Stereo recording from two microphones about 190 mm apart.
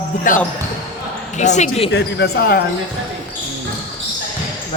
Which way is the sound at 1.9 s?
65° left (ahead or behind).